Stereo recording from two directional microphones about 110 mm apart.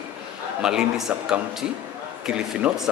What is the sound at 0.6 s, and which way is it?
Speech, 5° right (ahead or behind).